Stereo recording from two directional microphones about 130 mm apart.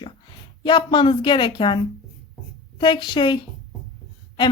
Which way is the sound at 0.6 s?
35° left (ahead or behind).